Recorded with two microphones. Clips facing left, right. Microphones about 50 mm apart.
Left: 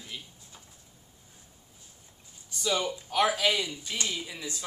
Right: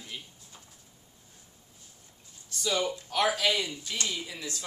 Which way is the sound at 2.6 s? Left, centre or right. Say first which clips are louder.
Even; centre.